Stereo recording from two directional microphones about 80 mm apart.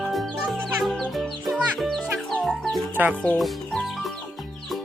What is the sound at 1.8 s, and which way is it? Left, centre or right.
Music, centre.